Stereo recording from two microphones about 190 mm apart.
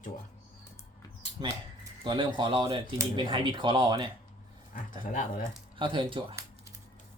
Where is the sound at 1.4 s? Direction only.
25° right (ahead or behind).